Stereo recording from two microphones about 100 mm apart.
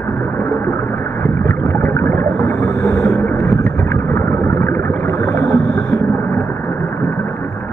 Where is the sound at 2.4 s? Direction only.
15° left (ahead or behind).